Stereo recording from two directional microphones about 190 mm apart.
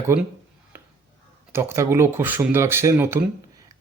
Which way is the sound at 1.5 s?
15° right (ahead or behind).